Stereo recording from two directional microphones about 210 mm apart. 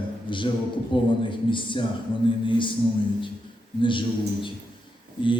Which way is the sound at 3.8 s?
25° left (ahead or behind).